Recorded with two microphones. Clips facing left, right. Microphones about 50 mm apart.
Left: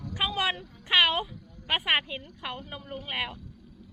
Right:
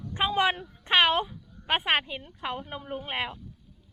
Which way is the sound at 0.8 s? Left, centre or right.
Right.